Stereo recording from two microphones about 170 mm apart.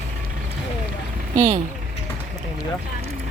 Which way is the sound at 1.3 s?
35° right (ahead or behind).